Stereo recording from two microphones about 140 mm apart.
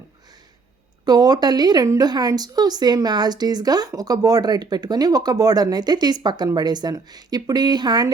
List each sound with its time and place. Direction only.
1.0 s a woman's voice: 30° right (ahead or behind)